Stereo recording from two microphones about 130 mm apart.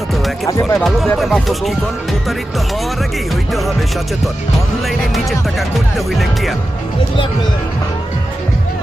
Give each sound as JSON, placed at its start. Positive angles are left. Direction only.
{"t": 0.4, "sound": "speech", "side_deg": 25}
{"t": 0.9, "sound": "speech", "side_deg": 0}
{"t": 4.9, "sound": "speech", "side_deg": 0}